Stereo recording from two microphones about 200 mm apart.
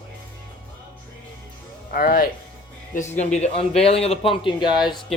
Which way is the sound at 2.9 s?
35° left (ahead or behind).